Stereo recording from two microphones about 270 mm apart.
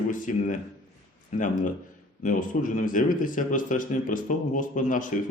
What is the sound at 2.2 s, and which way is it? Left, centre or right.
Speech, left.